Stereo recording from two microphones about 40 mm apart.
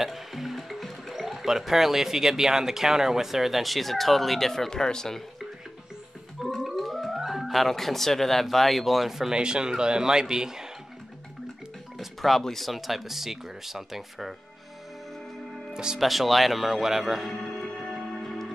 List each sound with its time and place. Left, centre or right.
0.0 s speech: centre
6.6 s speech: centre
9.3 s speech: right
12.0 s speech: centre
15.7 s speech: centre
16.0 s speech: centre
17.4 s music: centre